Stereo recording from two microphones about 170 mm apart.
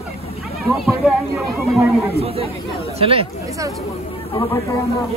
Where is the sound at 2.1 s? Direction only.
35° right (ahead or behind).